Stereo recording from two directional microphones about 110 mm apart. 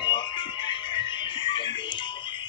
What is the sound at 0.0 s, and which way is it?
Music, 45° left (ahead or behind).